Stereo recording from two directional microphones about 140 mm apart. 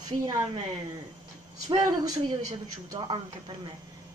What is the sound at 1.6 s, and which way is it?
Speech, 25° right (ahead or behind).